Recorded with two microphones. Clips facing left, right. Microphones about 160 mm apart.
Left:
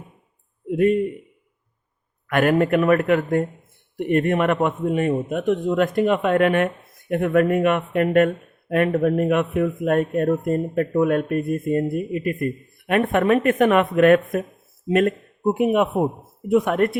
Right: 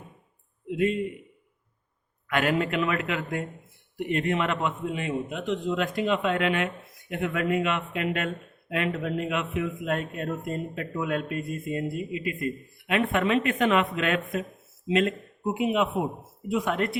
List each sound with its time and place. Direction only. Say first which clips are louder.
0.7 s a man's voice: left 7 dB; 50° left (ahead or behind)
2.2 s a man's voice: left 7 dB; 50° left (ahead or behind)